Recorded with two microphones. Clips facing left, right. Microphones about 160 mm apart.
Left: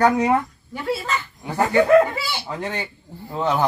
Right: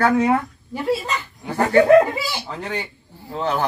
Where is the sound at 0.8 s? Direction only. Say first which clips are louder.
Right 3 dB; 20° right (ahead or behind).